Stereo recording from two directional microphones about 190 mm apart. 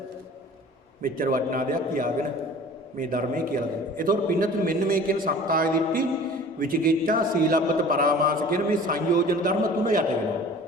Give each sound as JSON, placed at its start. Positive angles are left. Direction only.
{"t": 1.0, "sound": "a man's voice", "side_deg": -50}